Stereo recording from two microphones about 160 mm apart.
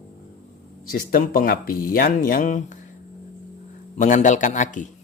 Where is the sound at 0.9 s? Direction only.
60° left (ahead or behind).